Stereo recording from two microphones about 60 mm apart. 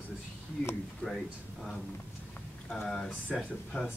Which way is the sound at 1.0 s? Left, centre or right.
Centre.